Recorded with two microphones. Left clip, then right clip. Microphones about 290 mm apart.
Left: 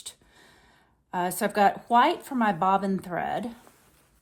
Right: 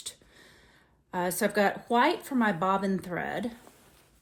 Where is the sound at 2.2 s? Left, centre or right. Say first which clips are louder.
Left 3 dB; centre.